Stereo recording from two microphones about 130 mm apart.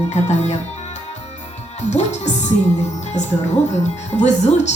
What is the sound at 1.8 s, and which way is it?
Speech, 65° left (ahead or behind).